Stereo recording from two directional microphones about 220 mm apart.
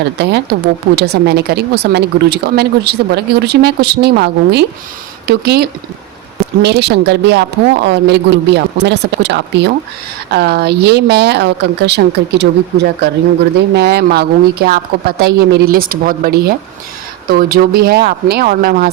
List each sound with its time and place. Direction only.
0.5 s speech: 50° right (ahead or behind)